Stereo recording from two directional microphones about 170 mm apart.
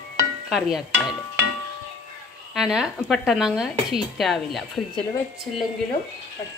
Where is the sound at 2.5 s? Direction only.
Centre (ahead or behind).